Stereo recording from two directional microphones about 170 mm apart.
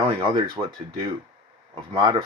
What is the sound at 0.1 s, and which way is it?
Speech, 25° right (ahead or behind).